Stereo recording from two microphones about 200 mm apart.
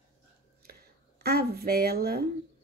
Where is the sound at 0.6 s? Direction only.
50° right (ahead or behind).